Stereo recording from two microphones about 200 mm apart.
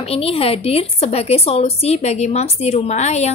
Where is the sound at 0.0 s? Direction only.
30° left (ahead or behind).